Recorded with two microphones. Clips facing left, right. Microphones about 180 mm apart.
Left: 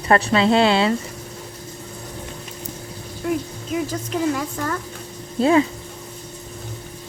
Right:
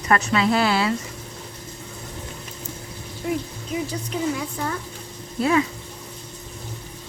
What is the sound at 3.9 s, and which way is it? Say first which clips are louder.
Speech: left 4 dB; 50° left (ahead or behind).